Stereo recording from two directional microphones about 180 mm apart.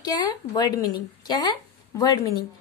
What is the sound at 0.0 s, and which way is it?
A woman's voice, 25° left (ahead or behind).